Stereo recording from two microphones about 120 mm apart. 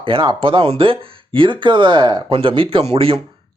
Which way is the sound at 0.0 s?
45° right (ahead or behind).